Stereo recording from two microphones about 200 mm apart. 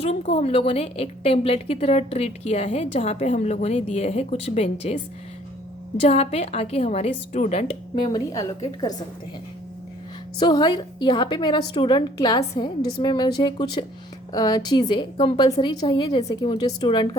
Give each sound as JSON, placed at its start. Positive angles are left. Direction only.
{"t": 0.0, "sound": "a woman's voice", "side_deg": 30}
{"t": 6.1, "sound": "a woman's voice", "side_deg": 30}
{"t": 10.4, "sound": "a woman's voice", "side_deg": 20}